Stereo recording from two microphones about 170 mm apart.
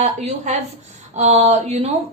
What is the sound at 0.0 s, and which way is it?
A woman's voice, 40° right (ahead or behind).